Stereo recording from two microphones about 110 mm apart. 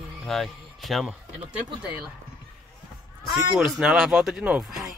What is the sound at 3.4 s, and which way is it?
Speech, 5° right (ahead or behind).